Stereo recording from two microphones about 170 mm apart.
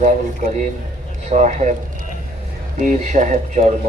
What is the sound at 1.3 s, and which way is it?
Speech, 45° right (ahead or behind).